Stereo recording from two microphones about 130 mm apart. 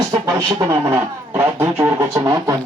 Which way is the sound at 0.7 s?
20° right (ahead or behind).